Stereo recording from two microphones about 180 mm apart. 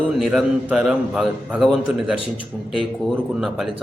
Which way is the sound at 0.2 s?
5° right (ahead or behind).